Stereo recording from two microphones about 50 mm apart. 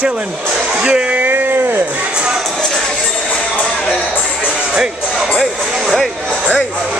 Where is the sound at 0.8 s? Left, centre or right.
Centre.